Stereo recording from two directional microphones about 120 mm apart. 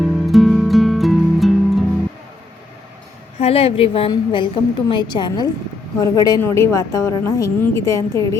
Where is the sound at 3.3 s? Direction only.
55° left (ahead or behind).